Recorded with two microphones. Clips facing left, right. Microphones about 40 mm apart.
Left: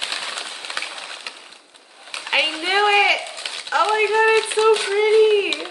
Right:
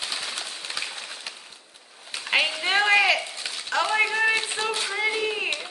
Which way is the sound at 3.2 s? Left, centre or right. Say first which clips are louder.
Left 3 dB; left.